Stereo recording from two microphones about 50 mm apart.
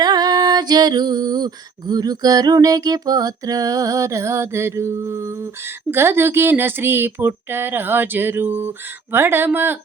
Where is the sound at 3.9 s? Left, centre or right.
Right.